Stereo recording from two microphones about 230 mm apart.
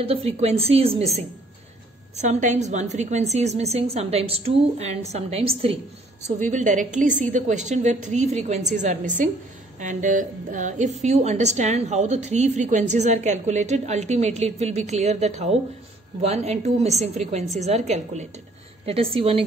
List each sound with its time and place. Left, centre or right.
0.0 s a woman's voice: right
2.2 s a woman's voice: right